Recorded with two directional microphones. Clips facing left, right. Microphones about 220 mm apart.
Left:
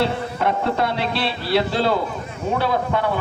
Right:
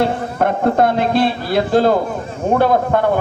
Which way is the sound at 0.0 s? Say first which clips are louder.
Right 4 dB; 50° right (ahead or behind).